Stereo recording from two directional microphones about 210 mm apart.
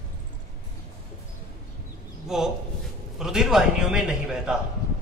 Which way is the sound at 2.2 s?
5° right (ahead or behind).